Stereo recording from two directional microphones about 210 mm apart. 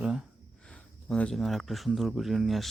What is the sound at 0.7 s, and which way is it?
Speech, 5° left (ahead or behind).